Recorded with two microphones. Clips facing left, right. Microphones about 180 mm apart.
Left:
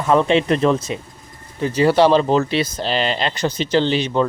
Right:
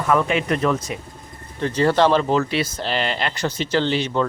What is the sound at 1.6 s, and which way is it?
Speech, 10° left (ahead or behind).